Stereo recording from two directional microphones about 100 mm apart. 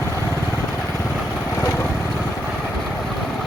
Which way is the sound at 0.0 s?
25° left (ahead or behind).